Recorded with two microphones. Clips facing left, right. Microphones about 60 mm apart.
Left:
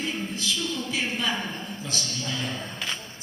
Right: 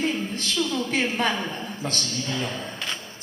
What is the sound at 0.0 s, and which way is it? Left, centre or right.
A woman's voice, right.